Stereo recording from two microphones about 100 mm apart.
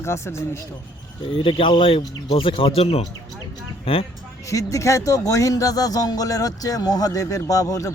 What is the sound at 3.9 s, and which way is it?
Speech, 70° left (ahead or behind).